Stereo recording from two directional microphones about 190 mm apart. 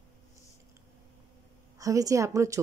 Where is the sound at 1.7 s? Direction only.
15° right (ahead or behind).